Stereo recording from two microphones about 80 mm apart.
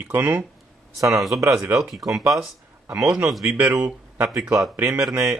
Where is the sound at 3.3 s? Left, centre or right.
Centre.